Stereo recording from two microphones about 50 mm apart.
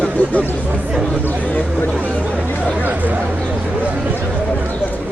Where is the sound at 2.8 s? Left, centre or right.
Right.